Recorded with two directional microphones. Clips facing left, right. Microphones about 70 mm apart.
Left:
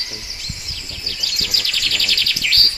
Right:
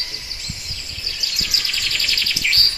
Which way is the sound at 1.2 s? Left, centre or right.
Right.